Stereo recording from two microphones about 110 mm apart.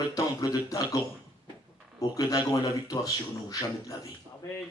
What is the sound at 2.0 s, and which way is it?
A man's voice, 35° left (ahead or behind).